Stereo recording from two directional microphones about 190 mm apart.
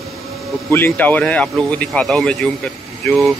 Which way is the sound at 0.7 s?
10° left (ahead or behind).